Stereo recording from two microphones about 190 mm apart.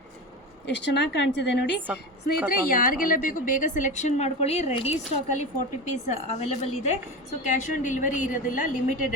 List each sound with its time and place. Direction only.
0.8 s a woman's voice: 70° left (ahead or behind)
2.5 s a woman's voice: 45° left (ahead or behind)